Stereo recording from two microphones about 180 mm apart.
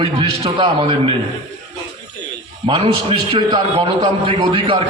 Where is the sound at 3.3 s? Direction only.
25° right (ahead or behind).